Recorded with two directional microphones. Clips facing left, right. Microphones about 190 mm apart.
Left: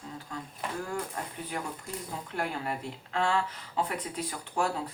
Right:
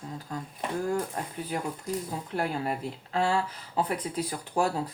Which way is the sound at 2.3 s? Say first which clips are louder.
Right 4 dB; 35° right (ahead or behind).